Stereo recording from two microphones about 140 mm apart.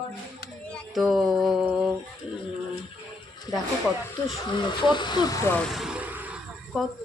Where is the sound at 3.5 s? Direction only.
25° left (ahead or behind).